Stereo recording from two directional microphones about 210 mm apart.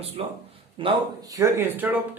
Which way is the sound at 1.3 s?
10° right (ahead or behind).